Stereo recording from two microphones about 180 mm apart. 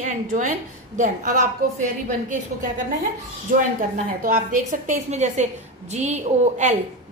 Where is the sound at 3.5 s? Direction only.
45° right (ahead or behind).